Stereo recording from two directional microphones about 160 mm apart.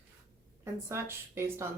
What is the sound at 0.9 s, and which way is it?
Speech, 15° right (ahead or behind).